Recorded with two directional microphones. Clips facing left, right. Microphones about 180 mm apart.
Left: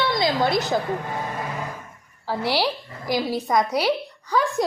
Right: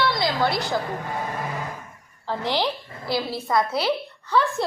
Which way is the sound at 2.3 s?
10° left (ahead or behind).